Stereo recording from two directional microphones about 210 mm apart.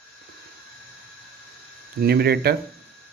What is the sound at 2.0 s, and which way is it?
Speech, 50° right (ahead or behind).